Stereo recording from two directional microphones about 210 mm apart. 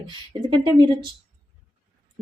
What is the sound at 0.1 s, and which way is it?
Speech, 20° right (ahead or behind).